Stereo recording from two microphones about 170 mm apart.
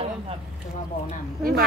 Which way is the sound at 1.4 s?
60° right (ahead or behind).